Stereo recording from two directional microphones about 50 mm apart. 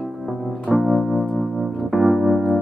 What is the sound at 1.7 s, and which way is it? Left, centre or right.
Keyboard, centre.